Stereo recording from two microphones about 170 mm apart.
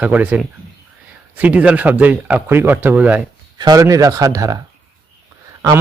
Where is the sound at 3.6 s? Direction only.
20° right (ahead or behind).